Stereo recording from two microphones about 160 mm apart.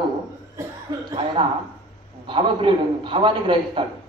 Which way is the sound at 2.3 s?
30° right (ahead or behind).